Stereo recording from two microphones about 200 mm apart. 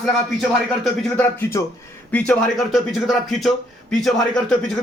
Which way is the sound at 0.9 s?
5° left (ahead or behind).